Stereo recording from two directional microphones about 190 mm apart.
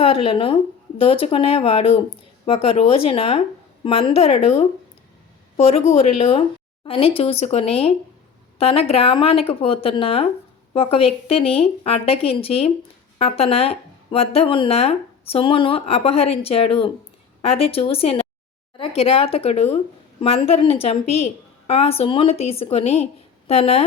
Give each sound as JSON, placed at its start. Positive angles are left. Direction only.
{"t": 0.0, "sound": "speech", "side_deg": 30}